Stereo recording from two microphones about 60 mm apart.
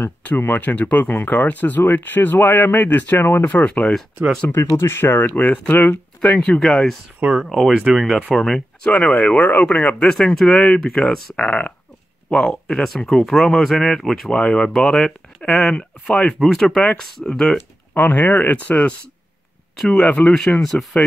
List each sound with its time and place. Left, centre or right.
0.5 s speech: left
4.6 s speech: left
5.1 s speech: left
7.4 s speech: centre
8.9 s speech: left
9.8 s speech: centre
14.3 s speech: centre
17.9 s speech: left
19.8 s speech: centre